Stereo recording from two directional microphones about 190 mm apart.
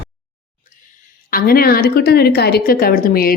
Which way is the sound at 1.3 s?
50° left (ahead or behind).